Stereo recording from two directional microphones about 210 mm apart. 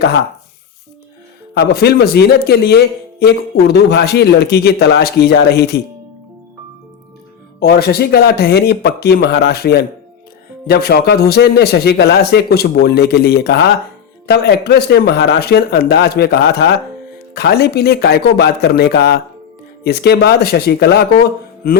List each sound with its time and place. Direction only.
1.5 s a man's voice: 50° left (ahead or behind)
7.6 s a man's voice: 50° left (ahead or behind)